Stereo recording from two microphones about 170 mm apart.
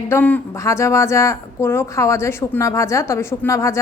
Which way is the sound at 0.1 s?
10° left (ahead or behind).